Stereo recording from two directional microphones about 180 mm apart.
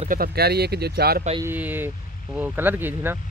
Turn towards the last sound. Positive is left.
turn(degrees=-10)  # may be behind; listen again after turning